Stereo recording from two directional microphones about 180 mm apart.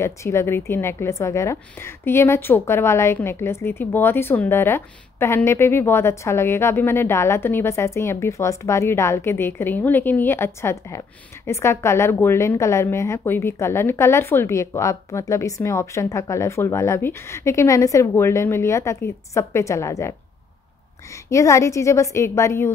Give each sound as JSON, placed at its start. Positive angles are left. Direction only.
{"t": 0.0, "sound": "a woman's voice", "side_deg": 15}